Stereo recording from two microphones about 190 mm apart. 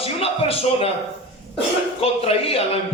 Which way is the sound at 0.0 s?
30° left (ahead or behind).